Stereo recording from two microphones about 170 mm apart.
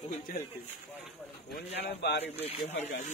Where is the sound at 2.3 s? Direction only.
35° left (ahead or behind).